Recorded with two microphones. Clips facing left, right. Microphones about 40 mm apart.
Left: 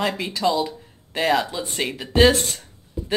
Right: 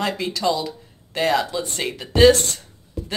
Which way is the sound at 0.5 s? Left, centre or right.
Centre.